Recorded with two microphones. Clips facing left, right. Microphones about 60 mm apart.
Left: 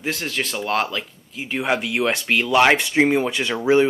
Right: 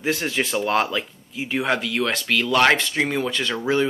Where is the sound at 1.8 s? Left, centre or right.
Centre.